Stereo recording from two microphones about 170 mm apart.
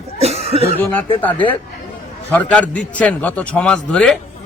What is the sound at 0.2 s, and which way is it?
Cough, 40° right (ahead or behind).